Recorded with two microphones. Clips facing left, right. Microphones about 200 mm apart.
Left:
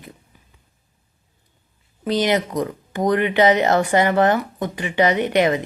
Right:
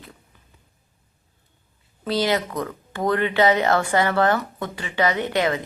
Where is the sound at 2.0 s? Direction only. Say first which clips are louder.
Left 3 dB; 20° left (ahead or behind).